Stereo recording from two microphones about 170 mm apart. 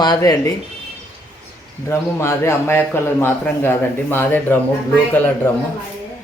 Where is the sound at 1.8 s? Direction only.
15° left (ahead or behind).